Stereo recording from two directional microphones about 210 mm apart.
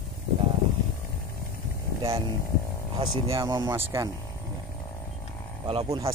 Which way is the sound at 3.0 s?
20° right (ahead or behind).